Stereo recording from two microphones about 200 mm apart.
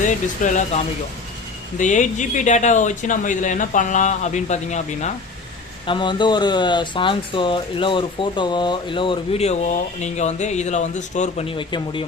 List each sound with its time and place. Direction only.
0.0 s speech: 40° left (ahead or behind)
5.8 s speech: 25° left (ahead or behind)